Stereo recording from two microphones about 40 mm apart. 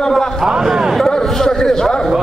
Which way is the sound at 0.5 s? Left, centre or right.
Centre.